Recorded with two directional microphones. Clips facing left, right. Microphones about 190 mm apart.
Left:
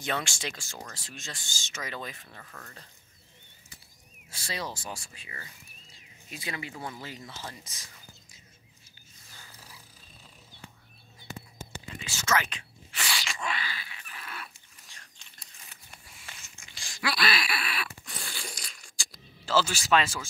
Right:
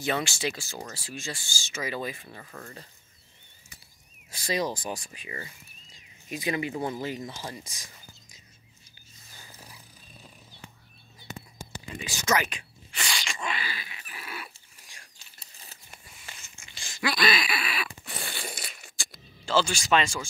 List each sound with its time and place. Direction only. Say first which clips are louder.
0.0 s speech: right 4 dB; 5° right (ahead or behind)
4.3 s speech: right 8 dB; 15° right (ahead or behind)
9.4 s dog: right 3 dB; 15° right (ahead or behind)
11.2 s whispering: right 1 dB; 15° right (ahead or behind)
12.9 s a sound: right 1 dB; 5° left (ahead or behind)
15.3 s crumpling: right 2 dB; 30° right (ahead or behind)
15.9 s a sound: right 1 dB; centre (ahead or behind)